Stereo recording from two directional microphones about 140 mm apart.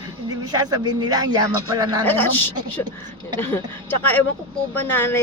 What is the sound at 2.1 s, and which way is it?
Speech, 15° left (ahead or behind).